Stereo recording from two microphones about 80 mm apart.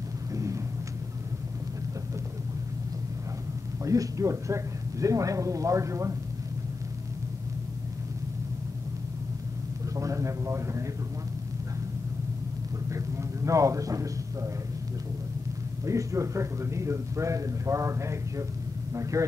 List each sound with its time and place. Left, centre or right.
0.3 s a sound: right
3.8 s a man's voice: right
9.9 s a man's voice: right
12.9 s a man's voice: right
15.8 s a man's voice: right